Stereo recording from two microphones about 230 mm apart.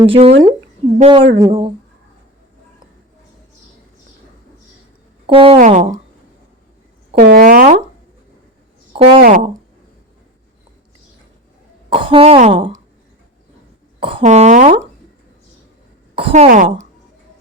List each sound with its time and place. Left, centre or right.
0.0 s speech: right
5.2 s speech: right
7.2 s a sound: right
9.2 s speech: right
11.9 s speech: right
14.0 s speech: right
16.1 s speech: right